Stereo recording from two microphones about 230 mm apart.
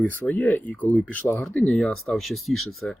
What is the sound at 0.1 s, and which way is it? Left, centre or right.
Speech, centre.